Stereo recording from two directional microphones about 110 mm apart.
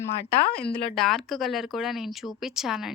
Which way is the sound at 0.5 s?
5° left (ahead or behind).